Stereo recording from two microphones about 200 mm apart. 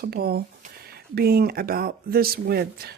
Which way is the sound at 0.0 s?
50° right (ahead or behind).